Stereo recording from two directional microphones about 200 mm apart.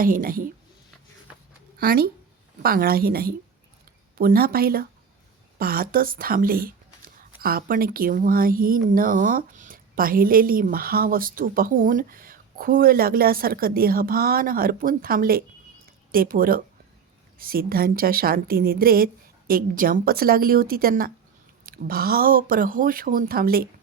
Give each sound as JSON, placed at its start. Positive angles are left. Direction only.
{"t": 0.0, "sound": "speech", "side_deg": -45}
{"t": 1.8, "sound": "speech", "side_deg": -45}